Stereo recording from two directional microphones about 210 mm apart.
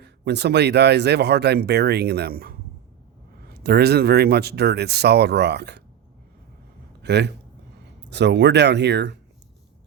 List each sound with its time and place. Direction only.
0.0 s speech: 50° right (ahead or behind)
7.0 s speech: 55° right (ahead or behind)